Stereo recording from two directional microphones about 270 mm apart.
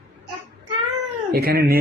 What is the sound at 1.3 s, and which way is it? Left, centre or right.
Speech, right.